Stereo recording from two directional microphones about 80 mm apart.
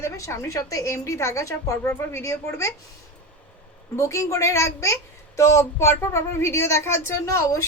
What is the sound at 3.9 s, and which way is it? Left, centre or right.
A woman's voice, left.